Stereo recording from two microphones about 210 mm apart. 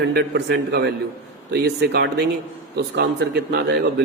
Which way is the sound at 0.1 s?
50° right (ahead or behind).